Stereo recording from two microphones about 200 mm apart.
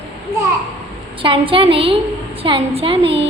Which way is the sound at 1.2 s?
25° right (ahead or behind).